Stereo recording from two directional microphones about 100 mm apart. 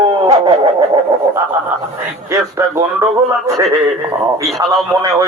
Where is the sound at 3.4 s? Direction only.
30° right (ahead or behind).